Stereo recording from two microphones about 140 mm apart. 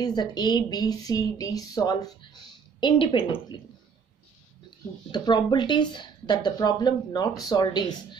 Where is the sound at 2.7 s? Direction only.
35° left (ahead or behind).